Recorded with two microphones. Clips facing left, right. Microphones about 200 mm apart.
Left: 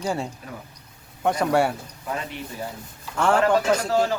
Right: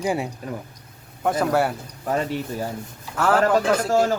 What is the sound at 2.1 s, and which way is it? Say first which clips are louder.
Speech: right 7 dB; 40° right (ahead or behind).